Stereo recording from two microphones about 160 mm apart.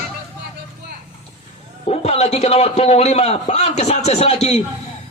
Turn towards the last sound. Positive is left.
turn(degrees=45)  # may be behind; listen again after turning